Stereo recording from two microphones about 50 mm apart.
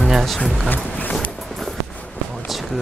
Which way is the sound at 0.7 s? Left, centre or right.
Left.